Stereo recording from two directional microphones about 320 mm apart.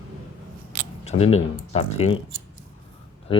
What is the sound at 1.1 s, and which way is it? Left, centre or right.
Speech, centre.